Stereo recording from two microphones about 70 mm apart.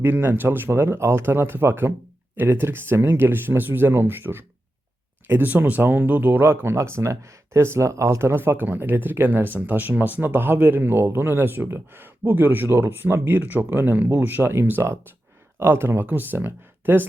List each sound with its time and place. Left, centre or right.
0.0 s speech: right